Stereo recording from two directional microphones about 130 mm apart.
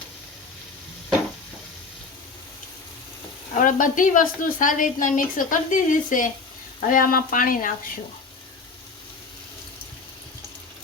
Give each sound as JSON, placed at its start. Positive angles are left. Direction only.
{"t": 3.5, "sound": "a woman's voice", "side_deg": 90}